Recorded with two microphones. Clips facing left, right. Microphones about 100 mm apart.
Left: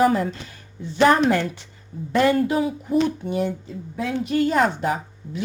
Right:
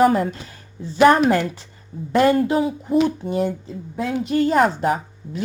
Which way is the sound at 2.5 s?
30° right (ahead or behind).